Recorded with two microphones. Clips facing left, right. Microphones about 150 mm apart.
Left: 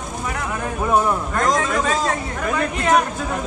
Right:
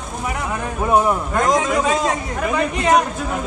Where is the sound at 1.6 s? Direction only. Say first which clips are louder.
Right 2 dB; 15° right (ahead or behind).